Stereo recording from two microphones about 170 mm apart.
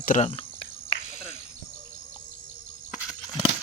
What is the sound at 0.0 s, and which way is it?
Speech, 50° left (ahead or behind).